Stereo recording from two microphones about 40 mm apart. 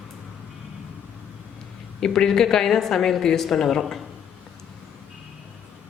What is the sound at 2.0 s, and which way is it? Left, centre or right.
Speech, centre.